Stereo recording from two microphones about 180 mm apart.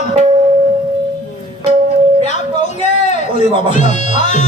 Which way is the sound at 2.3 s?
40° left (ahead or behind).